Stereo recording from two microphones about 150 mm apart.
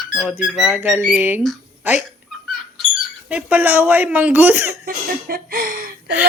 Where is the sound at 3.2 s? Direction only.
10° right (ahead or behind).